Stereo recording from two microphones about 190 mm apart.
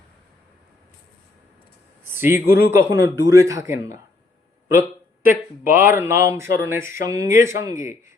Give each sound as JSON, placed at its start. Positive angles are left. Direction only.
{"t": 2.0, "sound": "speech", "side_deg": -10}
{"t": 4.7, "sound": "a sound", "side_deg": -10}
{"t": 5.6, "sound": "speech", "side_deg": -10}